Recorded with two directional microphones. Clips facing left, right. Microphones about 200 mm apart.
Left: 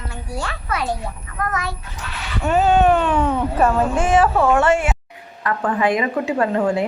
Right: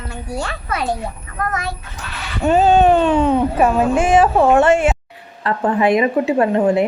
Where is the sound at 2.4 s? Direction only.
30° right (ahead or behind).